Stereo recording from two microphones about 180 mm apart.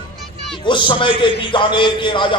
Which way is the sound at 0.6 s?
25° left (ahead or behind).